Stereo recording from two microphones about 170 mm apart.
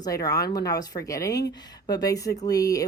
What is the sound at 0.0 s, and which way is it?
Speech, 20° left (ahead or behind).